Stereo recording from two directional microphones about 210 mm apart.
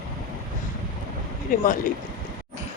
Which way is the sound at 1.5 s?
40° left (ahead or behind).